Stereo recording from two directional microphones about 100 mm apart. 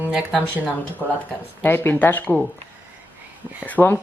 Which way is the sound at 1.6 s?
20° left (ahead or behind).